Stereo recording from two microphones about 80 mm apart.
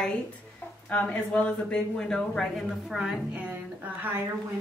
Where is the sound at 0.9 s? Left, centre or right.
Left.